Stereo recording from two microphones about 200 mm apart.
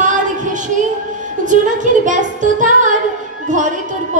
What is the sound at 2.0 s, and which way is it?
Music, 40° right (ahead or behind).